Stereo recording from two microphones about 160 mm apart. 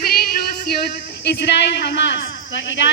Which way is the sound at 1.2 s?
90° left.